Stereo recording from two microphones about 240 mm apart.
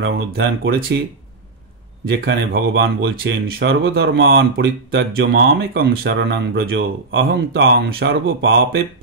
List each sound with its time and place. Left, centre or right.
0.0 s speech: right
2.0 s speech: right